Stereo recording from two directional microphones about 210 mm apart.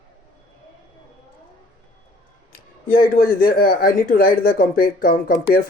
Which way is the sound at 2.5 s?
40° left (ahead or behind).